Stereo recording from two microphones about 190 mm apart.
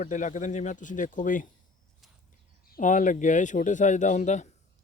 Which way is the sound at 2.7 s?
45° left (ahead or behind).